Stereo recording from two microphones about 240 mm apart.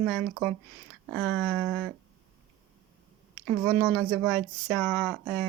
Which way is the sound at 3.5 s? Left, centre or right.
Centre.